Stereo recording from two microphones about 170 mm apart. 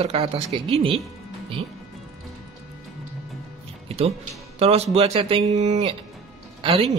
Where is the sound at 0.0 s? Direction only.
35° right (ahead or behind).